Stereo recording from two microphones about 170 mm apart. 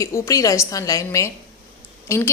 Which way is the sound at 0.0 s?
20° left (ahead or behind).